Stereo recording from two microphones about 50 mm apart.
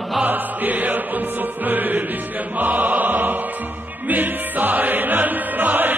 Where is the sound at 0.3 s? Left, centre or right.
Right.